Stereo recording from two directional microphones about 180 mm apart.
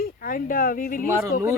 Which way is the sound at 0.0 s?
55° left (ahead or behind).